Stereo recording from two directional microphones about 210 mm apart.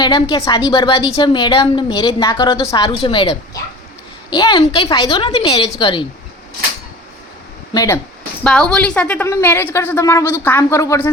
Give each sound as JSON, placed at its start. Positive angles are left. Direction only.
{"t": 0.0, "sound": "a woman's voice", "side_deg": 20}
{"t": 7.7, "sound": "speech", "side_deg": 15}
{"t": 8.4, "sound": "a woman's voice", "side_deg": 5}